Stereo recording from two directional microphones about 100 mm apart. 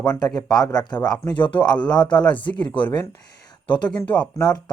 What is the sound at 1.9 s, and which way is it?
Speech, 45° left (ahead or behind).